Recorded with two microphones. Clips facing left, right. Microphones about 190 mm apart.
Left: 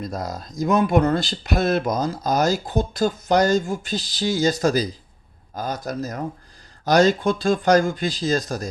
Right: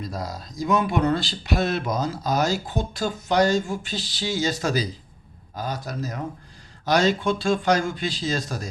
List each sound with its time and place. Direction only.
0.0 s speech: 50° left (ahead or behind)